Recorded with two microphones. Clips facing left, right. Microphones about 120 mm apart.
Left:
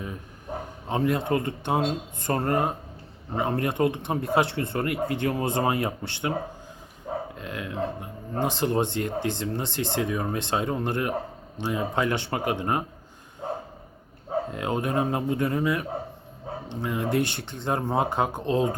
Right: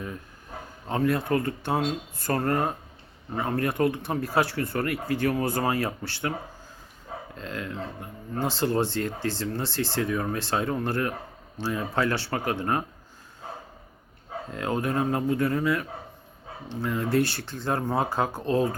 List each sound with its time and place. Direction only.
0.9 s speech: 20° left (ahead or behind)
7.3 s speech: 15° left (ahead or behind)
14.5 s speech: 20° left (ahead or behind)